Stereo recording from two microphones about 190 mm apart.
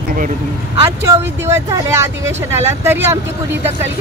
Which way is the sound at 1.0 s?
15° right (ahead or behind).